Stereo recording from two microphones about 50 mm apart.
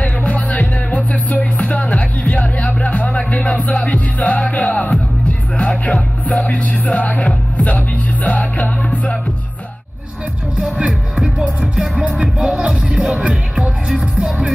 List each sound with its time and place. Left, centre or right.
0.0 s music: left
10.6 s music: centre